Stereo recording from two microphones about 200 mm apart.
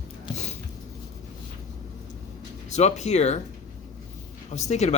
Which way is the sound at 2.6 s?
35° left (ahead or behind).